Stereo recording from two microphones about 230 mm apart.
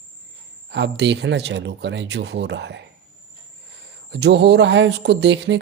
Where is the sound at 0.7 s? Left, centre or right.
Right.